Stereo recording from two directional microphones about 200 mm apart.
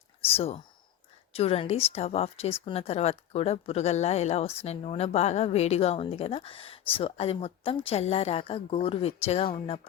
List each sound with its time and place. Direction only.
0.3 s a woman's voice: 30° left (ahead or behind)